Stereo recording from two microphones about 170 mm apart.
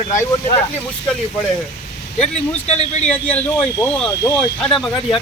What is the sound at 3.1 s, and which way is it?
Speech, 10° left (ahead or behind).